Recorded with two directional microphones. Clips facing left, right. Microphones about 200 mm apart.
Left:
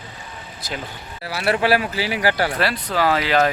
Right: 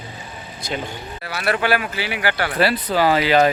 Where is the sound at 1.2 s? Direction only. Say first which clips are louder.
Left 2 dB; 30° left (ahead or behind).